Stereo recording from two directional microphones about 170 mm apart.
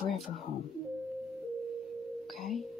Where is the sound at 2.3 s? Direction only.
Centre (ahead or behind).